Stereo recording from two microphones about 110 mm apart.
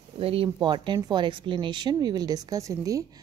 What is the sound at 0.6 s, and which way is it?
A woman's voice, 45° right (ahead or behind).